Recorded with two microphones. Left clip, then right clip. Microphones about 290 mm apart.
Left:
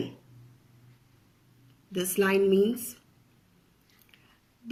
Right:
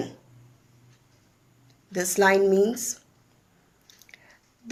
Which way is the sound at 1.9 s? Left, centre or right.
Right.